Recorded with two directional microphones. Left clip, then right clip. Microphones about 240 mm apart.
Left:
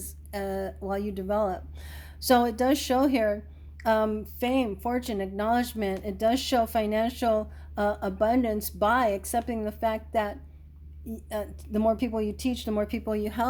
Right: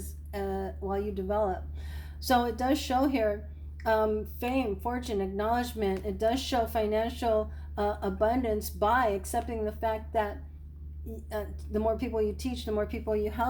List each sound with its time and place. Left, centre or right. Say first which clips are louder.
0.3 s speech: left 2 dB; left